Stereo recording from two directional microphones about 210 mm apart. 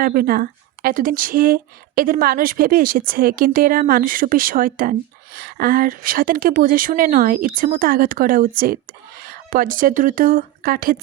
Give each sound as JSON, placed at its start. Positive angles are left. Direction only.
{"t": 0.0, "sound": "speech", "side_deg": -45}